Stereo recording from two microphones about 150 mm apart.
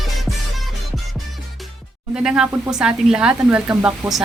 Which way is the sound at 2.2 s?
5° right (ahead or behind).